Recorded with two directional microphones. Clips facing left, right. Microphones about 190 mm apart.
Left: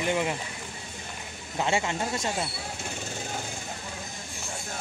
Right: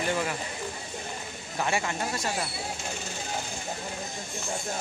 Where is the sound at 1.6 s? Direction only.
20° left (ahead or behind).